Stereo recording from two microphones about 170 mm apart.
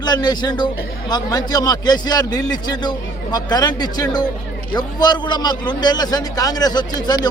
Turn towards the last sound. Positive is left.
turn(degrees=25)  # may be behind; listen again after turning